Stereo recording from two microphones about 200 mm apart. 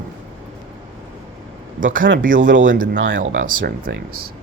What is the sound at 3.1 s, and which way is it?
Speech, 40° right (ahead or behind).